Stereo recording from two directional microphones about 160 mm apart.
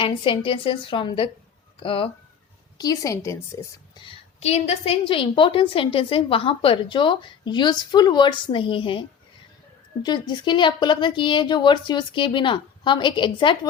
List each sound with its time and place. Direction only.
0.0 s a woman's voice: 30° left (ahead or behind)
2.7 s a woman's voice: 25° left (ahead or behind)
4.0 s a woman's voice: 40° left (ahead or behind)